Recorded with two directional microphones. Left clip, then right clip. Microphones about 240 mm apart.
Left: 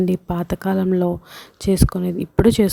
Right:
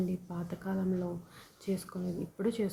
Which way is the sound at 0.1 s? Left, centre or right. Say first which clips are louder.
Left 18 dB; left.